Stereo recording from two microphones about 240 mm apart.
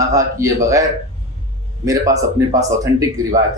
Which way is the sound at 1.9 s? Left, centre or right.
Centre.